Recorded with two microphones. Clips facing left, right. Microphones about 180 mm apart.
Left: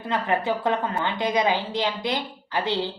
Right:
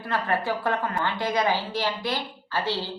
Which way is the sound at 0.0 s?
20° left (ahead or behind).